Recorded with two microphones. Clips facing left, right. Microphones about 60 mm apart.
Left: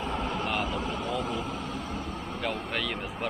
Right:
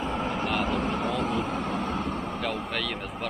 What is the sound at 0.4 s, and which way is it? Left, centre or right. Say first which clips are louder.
Vehicle: right 3 dB; centre.